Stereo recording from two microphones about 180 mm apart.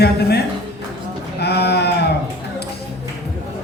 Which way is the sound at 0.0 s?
65° left (ahead or behind).